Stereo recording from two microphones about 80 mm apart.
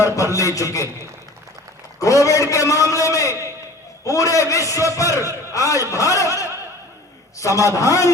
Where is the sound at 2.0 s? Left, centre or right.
Left.